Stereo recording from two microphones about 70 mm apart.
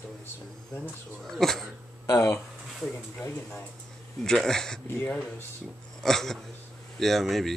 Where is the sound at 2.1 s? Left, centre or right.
Left.